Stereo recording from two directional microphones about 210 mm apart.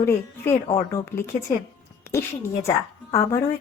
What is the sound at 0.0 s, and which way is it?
Speech, 10° left (ahead or behind).